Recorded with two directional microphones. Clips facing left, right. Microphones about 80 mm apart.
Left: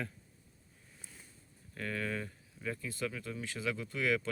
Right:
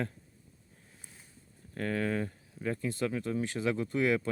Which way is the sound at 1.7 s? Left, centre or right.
Right.